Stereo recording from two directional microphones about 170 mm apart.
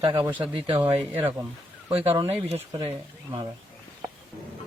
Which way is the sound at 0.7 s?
15° right (ahead or behind).